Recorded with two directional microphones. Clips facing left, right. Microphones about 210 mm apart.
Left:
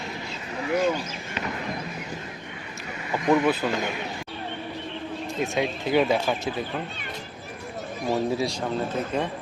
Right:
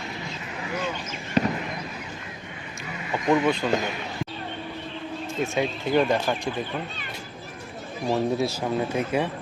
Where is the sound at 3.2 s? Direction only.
5° left (ahead or behind).